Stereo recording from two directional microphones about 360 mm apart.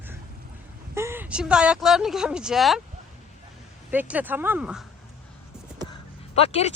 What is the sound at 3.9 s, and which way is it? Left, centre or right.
Speech, centre.